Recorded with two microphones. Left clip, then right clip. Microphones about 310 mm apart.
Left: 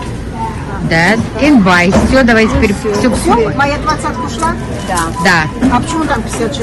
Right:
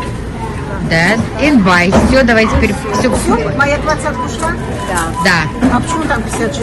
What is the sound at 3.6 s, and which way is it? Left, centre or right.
Speech, centre.